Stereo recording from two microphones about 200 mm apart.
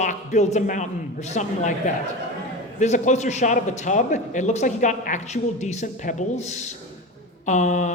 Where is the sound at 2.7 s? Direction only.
35° left (ahead or behind).